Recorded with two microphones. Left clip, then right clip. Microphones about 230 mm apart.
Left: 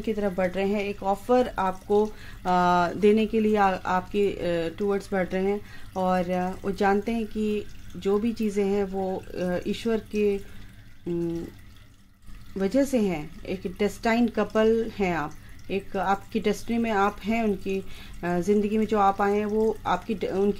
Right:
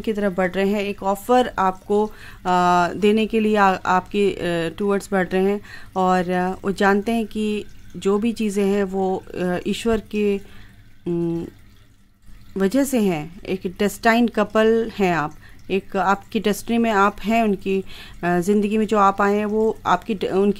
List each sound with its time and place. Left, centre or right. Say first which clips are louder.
0.0 s speech: right 5 dB; right
12.5 s speech: right 4 dB; right